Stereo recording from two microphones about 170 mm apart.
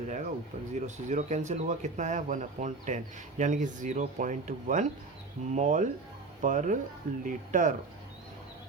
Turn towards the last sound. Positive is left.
turn(degrees=-50)  # may be behind; listen again after turning